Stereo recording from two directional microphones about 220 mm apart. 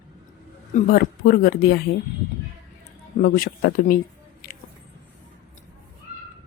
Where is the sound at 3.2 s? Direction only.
40° left (ahead or behind).